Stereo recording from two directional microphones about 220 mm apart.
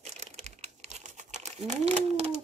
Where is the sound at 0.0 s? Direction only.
30° right (ahead or behind).